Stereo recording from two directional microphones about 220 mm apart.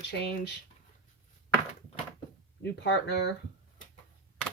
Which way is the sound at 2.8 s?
50° left (ahead or behind).